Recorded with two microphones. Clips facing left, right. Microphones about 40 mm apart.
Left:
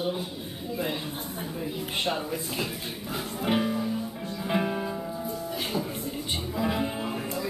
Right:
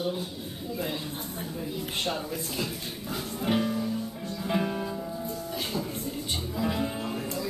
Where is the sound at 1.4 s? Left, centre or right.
Centre.